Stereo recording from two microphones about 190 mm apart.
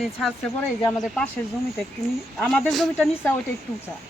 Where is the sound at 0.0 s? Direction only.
Centre (ahead or behind).